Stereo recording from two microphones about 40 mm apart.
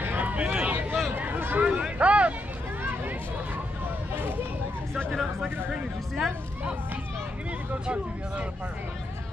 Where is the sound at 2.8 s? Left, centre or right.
Right.